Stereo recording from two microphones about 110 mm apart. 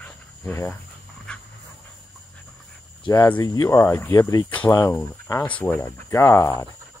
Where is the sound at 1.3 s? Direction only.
10° left (ahead or behind).